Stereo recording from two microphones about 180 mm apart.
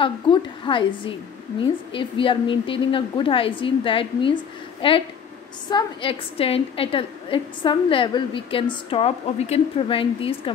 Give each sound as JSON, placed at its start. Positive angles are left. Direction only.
{"t": 0.0, "sound": "a woman's voice", "side_deg": 25}